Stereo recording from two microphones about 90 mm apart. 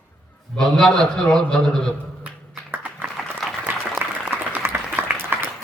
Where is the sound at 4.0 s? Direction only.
20° right (ahead or behind).